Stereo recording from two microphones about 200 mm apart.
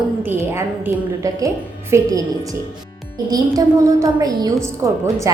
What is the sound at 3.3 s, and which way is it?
Speech, 15° right (ahead or behind).